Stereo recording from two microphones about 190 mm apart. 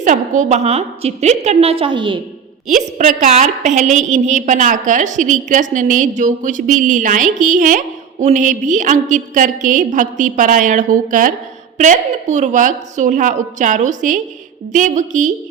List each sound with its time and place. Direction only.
0.0 s a woman's voice: 40° right (ahead or behind)
2.6 s a woman's voice: 40° right (ahead or behind)